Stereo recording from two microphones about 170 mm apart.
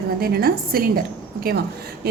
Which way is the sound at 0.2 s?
65° right (ahead or behind).